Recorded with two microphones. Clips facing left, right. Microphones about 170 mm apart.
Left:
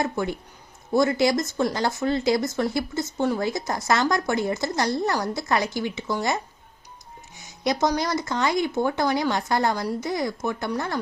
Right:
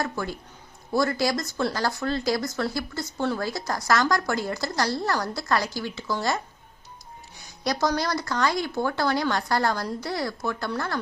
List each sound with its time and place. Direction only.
0.0 s speech: 20° left (ahead or behind)
7.6 s speech: 20° left (ahead or behind)